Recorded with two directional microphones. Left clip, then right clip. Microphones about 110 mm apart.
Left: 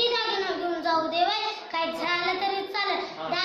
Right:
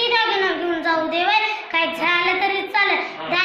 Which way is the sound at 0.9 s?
35° left (ahead or behind).